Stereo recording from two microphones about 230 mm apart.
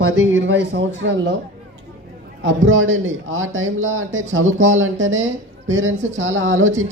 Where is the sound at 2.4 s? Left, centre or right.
Right.